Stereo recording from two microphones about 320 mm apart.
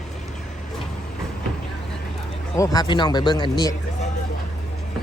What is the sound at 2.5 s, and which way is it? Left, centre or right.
A man's voice, centre.